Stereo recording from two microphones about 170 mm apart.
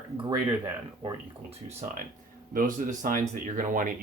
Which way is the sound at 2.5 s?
55° right (ahead or behind).